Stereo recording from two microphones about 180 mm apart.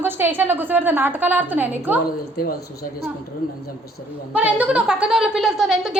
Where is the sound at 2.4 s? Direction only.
60° left (ahead or behind).